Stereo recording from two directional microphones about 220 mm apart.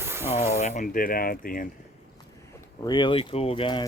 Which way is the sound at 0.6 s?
35° left (ahead or behind).